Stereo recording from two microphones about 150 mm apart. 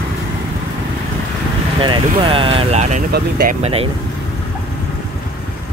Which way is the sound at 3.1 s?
85° right.